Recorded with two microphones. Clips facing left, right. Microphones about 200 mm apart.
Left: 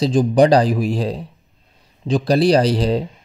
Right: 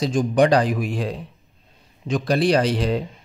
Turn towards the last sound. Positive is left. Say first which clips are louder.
# left 4 dB
turn(degrees=35)  # may be behind; listen again after turning